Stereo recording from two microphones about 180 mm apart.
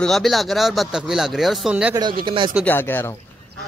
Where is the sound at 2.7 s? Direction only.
10° left (ahead or behind).